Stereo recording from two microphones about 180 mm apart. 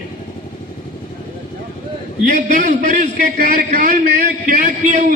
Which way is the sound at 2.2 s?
45° right (ahead or behind).